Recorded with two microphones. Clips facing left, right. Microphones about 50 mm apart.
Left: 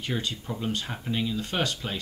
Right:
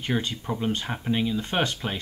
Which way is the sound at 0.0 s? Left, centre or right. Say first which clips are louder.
Right 4 dB; right.